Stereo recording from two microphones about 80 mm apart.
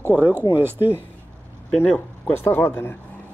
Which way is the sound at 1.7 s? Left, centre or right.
Centre.